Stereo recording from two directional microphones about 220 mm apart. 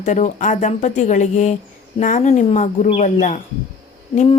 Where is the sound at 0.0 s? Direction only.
35° left (ahead or behind).